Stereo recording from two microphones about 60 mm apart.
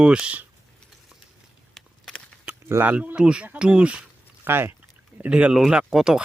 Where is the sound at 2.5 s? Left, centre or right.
Right.